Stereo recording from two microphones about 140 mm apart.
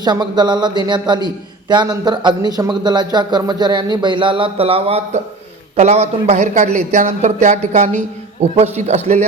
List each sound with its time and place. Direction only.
0.0 s a man's voice: 30° right (ahead or behind); by 9.2 s 50° right (ahead or behind)